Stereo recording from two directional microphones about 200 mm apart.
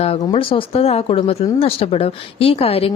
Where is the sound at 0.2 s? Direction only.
25° left (ahead or behind).